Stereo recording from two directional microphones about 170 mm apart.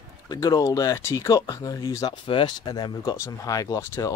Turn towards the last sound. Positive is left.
turn(degrees=20)  # may be behind; listen again after turning